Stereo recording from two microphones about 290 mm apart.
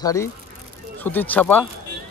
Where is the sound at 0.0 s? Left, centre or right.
Centre.